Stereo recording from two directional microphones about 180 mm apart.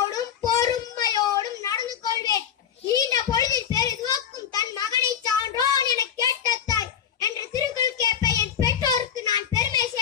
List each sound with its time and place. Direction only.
0.1 s child singing: 20° left (ahead or behind)
2.9 s a sound: 20° left (ahead or behind)
5.0 s child singing: 20° left (ahead or behind)